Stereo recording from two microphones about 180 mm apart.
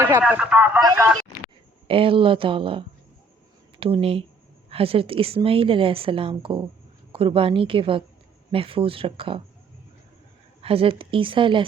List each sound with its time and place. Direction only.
0.2 s speech: 10° right (ahead or behind)
0.8 s speech: 20° right (ahead or behind)
1.9 s a woman's voice: 30° right (ahead or behind)
10.6 s a woman's voice: 30° right (ahead or behind)